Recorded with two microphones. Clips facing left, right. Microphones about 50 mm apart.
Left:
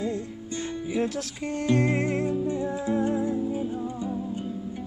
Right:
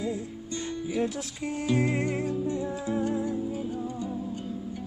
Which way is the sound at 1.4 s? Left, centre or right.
Centre.